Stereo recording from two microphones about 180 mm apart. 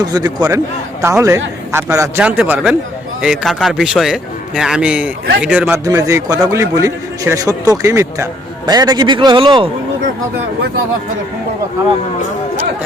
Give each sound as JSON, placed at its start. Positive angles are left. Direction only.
{"t": 0.0, "sound": "a man's voice", "side_deg": -20}